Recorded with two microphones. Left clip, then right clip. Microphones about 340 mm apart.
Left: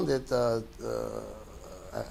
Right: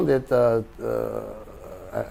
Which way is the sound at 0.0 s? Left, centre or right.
Right.